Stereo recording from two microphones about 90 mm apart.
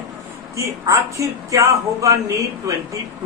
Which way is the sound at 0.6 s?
35° right (ahead or behind).